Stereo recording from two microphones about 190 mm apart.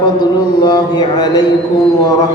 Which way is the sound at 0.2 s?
20° left (ahead or behind).